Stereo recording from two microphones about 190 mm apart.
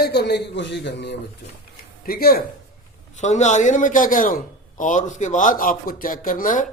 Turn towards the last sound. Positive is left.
turn(degrees=45)  # may be behind; listen again after turning